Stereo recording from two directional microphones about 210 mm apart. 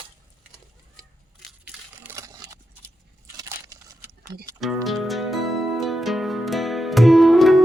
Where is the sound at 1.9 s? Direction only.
10° right (ahead or behind).